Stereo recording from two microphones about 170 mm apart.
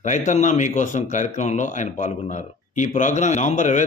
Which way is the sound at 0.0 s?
45° left (ahead or behind).